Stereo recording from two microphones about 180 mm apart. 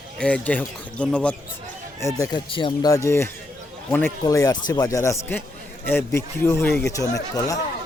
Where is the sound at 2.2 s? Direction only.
25° left (ahead or behind).